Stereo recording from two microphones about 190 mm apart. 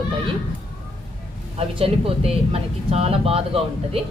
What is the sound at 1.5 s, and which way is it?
Speech, 30° right (ahead or behind).